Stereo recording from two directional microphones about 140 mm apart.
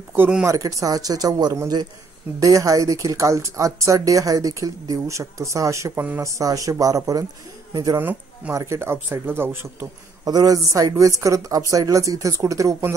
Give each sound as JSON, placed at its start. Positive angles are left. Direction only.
{"t": 0.1, "sound": "speech", "side_deg": -10}
{"t": 0.5, "sound": "a woman's voice", "side_deg": -25}
{"t": 8.0, "sound": "a woman's voice", "side_deg": -15}